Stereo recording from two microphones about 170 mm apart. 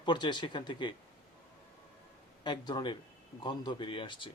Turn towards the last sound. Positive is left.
turn(degrees=30)  # may be behind; listen again after turning